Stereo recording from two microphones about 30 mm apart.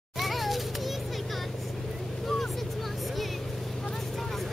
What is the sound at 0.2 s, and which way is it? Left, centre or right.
Children playing, centre.